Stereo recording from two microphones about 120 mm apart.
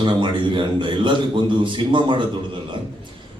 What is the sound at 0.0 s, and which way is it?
A man's voice, 40° right (ahead or behind).